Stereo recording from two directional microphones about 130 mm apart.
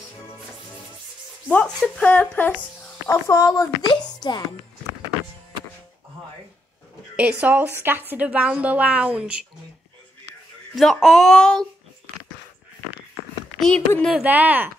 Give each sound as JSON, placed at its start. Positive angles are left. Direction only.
{"t": 1.5, "sound": "speech", "side_deg": 10}
{"t": 3.1, "sound": "a woman's voice", "side_deg": 25}
{"t": 7.2, "sound": "speech", "side_deg": -10}
{"t": 10.7, "sound": "speech", "side_deg": 0}
{"t": 13.6, "sound": "speech", "side_deg": 5}
{"t": 14.1, "sound": "speech", "side_deg": -10}